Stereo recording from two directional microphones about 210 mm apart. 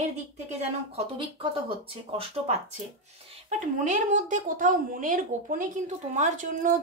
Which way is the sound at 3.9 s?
35° right (ahead or behind).